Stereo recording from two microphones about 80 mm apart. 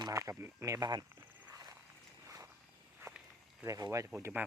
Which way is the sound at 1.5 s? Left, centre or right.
Right.